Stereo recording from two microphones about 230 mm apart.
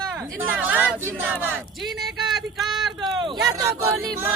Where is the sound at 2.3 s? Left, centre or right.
Centre.